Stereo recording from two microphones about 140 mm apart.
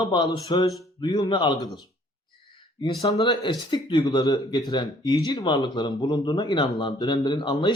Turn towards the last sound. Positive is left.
turn(degrees=35)  # may be behind; listen again after turning